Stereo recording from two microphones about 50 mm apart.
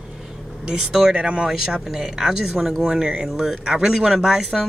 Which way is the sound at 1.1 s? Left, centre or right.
Right.